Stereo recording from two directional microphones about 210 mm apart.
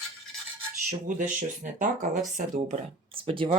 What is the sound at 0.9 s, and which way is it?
Speech, 40° right (ahead or behind).